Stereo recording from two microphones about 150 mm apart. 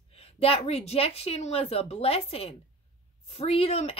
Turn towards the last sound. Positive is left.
turn(degrees=40)  # may be behind; listen again after turning